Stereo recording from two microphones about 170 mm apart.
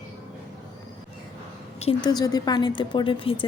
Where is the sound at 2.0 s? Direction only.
25° left (ahead or behind).